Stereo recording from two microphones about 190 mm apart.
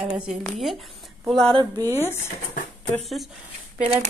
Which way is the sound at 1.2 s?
Centre (ahead or behind).